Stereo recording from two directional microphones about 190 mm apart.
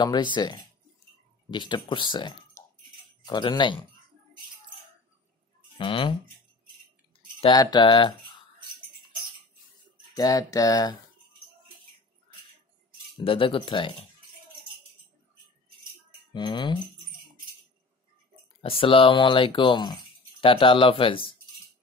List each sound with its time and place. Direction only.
0.0 s speech: 25° left (ahead or behind)
5.8 s speech: 25° left (ahead or behind)
7.3 s speech: 25° left (ahead or behind)
10.1 s speech: 20° left (ahead or behind)
13.2 s speech: 30° left (ahead or behind)
16.3 s speech: 25° left (ahead or behind)
18.6 s speech: 30° left (ahead or behind)